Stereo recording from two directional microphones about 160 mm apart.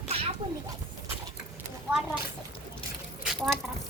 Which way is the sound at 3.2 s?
Centre (ahead or behind).